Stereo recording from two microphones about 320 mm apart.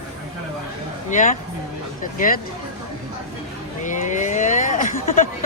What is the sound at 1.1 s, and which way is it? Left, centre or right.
Speech, left.